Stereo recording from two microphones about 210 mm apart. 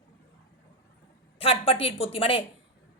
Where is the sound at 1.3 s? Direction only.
25° left (ahead or behind).